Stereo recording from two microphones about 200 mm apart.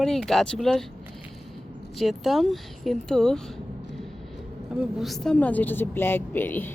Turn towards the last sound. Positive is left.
turn(degrees=10)  # may be behind; listen again after turning